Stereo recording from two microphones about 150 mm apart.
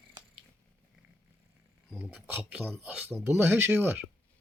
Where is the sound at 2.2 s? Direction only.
10° right (ahead or behind).